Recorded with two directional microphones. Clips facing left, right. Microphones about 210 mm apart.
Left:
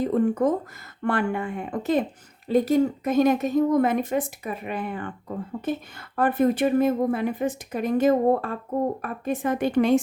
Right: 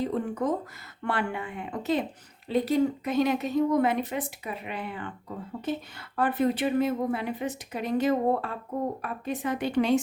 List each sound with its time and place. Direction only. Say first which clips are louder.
0.0 s a sound: left 7 dB; 50° left (ahead or behind)
1.0 s a woman's voice: left 5 dB; 50° left (ahead or behind)
6.1 s a woman's voice: left 4 dB; 50° left (ahead or behind)